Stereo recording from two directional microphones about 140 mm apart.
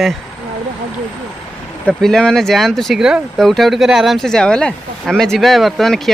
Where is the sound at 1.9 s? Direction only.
5° left (ahead or behind).